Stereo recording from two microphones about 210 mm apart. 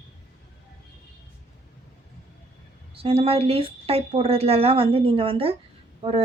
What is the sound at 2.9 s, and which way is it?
A woman's voice, 25° right (ahead or behind).